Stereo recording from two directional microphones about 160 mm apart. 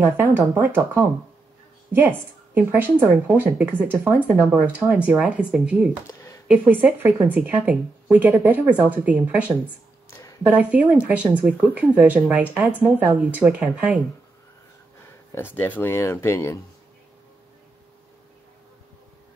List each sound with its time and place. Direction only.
0.0 s speech: 15° right (ahead or behind)
6.0 s a sound: 20° left (ahead or behind)
6.4 s speech: 10° right (ahead or behind)
15.3 s speech: 15° left (ahead or behind)